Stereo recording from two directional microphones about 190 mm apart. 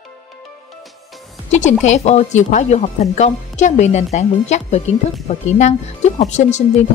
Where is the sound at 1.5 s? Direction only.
40° left (ahead or behind).